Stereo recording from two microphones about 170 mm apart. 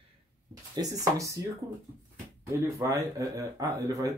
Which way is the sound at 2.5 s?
20° right (ahead or behind).